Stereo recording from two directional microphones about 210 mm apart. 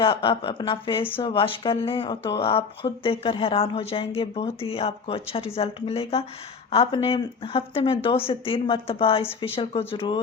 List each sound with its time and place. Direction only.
0.0 s a woman's voice: 25° left (ahead or behind)